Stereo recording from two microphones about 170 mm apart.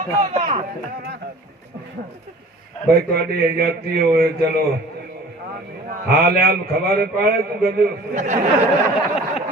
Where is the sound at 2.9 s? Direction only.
65° right (ahead or behind).